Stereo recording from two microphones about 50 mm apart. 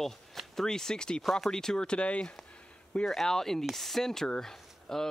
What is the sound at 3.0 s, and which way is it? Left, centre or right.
Speech, centre.